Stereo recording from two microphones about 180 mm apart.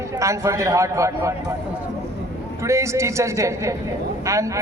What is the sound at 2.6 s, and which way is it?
A man's voice, 15° right (ahead or behind).